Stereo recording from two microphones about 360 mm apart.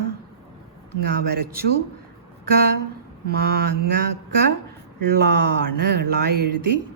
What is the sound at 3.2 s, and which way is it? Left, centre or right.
Speech, right.